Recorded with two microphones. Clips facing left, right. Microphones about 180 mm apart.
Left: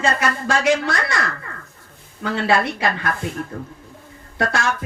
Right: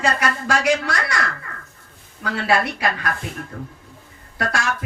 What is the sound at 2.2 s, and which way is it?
Speech, 25° left (ahead or behind).